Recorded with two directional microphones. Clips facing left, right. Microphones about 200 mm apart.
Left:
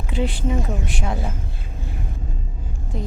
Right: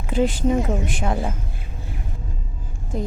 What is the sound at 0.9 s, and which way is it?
Speech, 50° right (ahead or behind).